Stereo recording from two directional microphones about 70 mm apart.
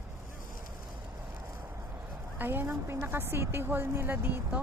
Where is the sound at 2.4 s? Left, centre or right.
Right.